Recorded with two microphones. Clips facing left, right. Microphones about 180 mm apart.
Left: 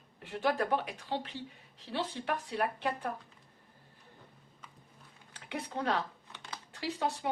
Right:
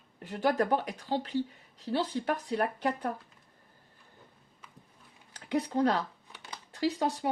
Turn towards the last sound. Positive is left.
turn(degrees=-40)  # may be behind; listen again after turning